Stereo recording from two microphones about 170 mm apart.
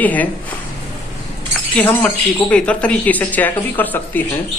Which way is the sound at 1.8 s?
10° left (ahead or behind).